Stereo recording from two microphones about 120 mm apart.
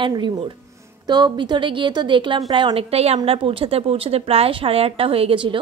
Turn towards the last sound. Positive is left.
turn(degrees=-45)  # may be behind; listen again after turning